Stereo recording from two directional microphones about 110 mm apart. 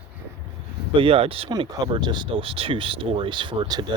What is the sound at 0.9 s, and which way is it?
Speech, 55° right (ahead or behind).